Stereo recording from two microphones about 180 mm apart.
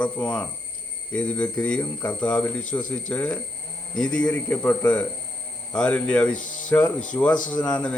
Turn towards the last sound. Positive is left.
turn(degrees=5)  # may be behind; listen again after turning